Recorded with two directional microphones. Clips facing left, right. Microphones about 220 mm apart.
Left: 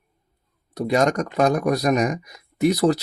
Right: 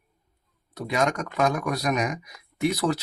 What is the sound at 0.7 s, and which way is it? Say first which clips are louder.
Speech: left 6 dB; 35° left (ahead or behind).